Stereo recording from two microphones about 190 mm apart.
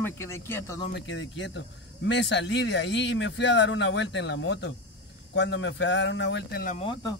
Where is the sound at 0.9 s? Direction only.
70° left (ahead or behind).